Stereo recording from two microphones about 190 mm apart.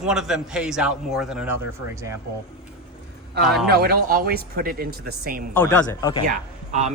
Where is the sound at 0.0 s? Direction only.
5° right (ahead or behind).